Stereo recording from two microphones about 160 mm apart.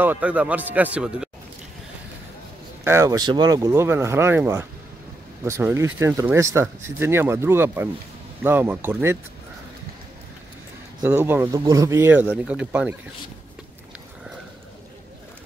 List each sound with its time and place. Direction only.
0.0 s speech: 10° right (ahead or behind)
2.8 s speech: 15° right (ahead or behind)
11.1 s speech: 15° right (ahead or behind)